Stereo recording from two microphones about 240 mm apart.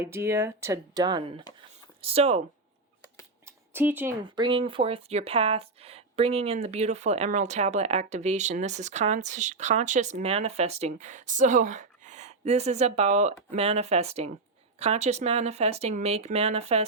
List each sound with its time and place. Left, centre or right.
0.0 s speech: centre
3.4 s a sound: centre
4.2 s speech: centre